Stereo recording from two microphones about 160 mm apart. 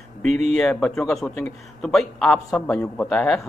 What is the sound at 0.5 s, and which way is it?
A man's voice, 5° left (ahead or behind).